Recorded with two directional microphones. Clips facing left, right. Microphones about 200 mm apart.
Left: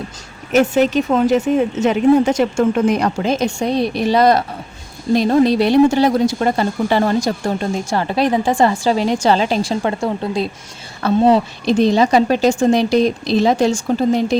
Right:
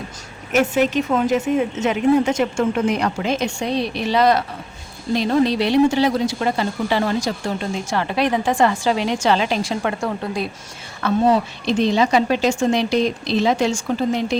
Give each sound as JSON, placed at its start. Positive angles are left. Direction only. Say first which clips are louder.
{"t": 1.1, "sound": "speech", "louder": "left 4 dB", "side_deg": 40}